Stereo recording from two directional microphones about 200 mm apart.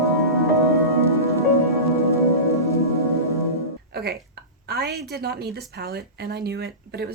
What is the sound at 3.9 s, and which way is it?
Music, 50° right (ahead or behind).